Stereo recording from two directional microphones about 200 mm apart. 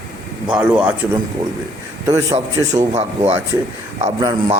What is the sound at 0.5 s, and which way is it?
Speech, 5° right (ahead or behind).